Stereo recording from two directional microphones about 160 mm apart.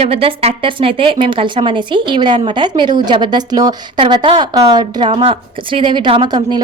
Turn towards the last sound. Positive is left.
turn(degrees=-25)  # may be behind; listen again after turning